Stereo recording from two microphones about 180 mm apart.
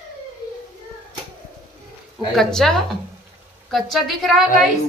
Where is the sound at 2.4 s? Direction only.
Centre (ahead or behind).